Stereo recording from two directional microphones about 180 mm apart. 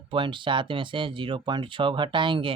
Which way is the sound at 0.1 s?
25° right (ahead or behind).